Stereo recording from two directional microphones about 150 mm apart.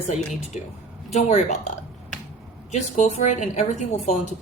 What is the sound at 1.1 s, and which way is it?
Speech, 45° left (ahead or behind).